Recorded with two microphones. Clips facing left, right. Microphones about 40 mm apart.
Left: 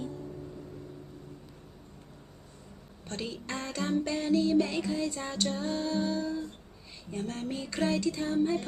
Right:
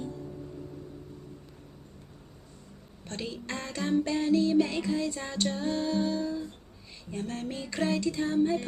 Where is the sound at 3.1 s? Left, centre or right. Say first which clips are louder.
Even; centre.